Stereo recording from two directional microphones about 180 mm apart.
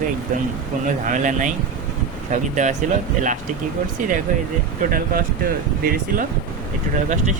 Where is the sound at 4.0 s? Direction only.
50° right (ahead or behind).